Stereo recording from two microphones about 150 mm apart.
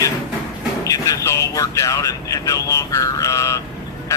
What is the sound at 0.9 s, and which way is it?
A man's voice, 20° left (ahead or behind).